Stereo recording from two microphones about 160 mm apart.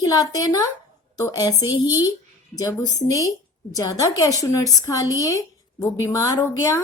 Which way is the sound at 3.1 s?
20° left (ahead or behind).